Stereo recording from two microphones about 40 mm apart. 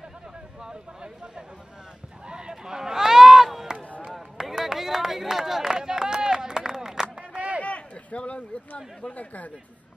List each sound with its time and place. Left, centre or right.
0.6 s a sound: centre
4.4 s run: centre
7.3 s run: right
7.6 s speech: left